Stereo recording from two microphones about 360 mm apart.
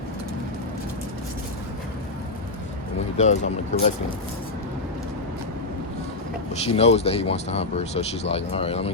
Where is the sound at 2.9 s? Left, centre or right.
Centre.